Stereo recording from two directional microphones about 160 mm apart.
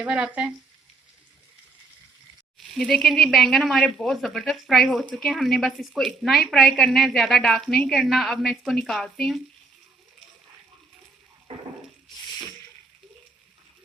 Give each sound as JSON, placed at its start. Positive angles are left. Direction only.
{"t": 0.0, "sound": "speech", "side_deg": -5}
{"t": 2.7, "sound": "speech", "side_deg": 0}
{"t": 11.5, "sound": "a sound", "side_deg": -35}